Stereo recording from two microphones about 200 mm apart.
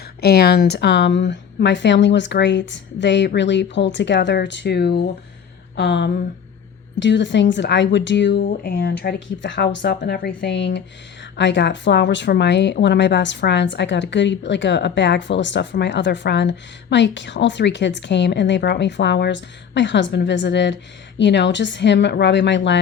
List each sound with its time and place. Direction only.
0.2 s speech: 50° left (ahead or behind)